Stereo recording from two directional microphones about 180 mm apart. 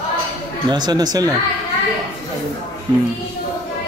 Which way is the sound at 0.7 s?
25° right (ahead or behind).